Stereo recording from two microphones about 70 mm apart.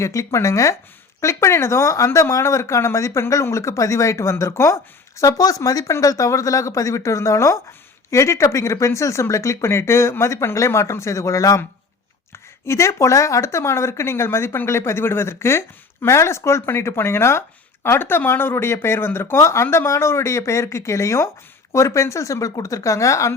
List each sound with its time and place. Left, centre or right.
0.0 s speech: left
12.6 s speech: left